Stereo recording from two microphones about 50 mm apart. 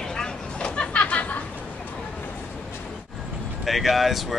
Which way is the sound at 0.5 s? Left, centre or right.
Left.